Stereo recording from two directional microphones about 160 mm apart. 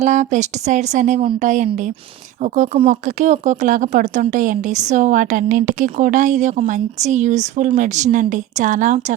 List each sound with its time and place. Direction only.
0.0 s a woman's voice: 50° right (ahead or behind)
2.7 s a woman's voice: 45° right (ahead or behind)